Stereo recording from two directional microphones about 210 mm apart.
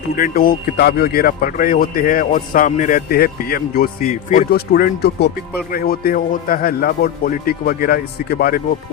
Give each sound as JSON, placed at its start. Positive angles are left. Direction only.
{"t": 0.2, "sound": "a man's voice", "side_deg": 45}